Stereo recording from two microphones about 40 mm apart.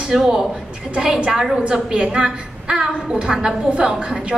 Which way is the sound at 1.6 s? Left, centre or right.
Right.